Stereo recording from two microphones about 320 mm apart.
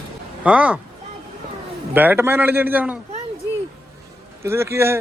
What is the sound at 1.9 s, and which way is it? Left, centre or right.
Speech, centre.